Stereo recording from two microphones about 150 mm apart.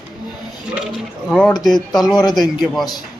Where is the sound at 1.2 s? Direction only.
5° left (ahead or behind).